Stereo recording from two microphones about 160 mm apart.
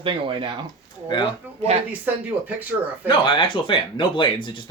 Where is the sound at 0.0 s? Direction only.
35° right (ahead or behind).